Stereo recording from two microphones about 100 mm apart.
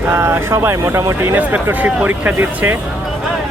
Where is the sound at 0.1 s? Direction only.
25° right (ahead or behind).